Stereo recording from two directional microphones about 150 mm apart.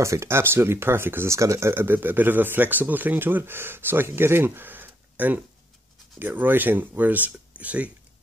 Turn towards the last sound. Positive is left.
turn(degrees=-10)  # may be behind; listen again after turning